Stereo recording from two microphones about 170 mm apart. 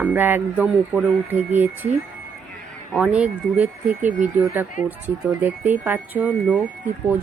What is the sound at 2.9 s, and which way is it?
Speech, 5° right (ahead or behind).